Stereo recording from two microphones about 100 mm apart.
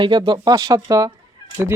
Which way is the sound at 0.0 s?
50° right (ahead or behind).